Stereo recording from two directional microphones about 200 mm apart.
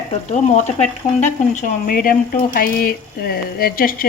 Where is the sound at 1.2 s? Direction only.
40° left (ahead or behind).